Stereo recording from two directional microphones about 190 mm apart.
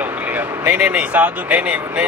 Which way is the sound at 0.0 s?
10° right (ahead or behind).